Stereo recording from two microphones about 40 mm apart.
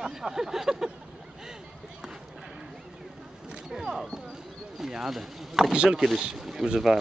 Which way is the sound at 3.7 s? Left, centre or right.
Centre.